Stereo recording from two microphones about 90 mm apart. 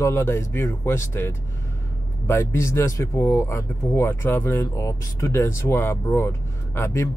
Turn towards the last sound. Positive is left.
turn(degrees=30)  # may be behind; listen again after turning